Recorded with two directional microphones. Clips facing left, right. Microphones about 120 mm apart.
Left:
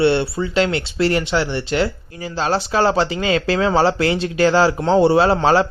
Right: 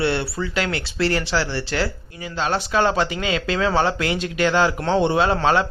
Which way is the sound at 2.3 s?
35° left (ahead or behind).